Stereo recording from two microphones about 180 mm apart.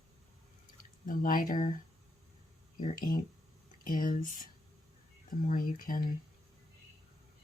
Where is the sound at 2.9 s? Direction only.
50° left (ahead or behind).